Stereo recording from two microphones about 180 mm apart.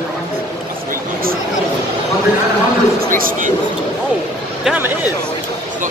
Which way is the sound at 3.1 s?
50° right (ahead or behind).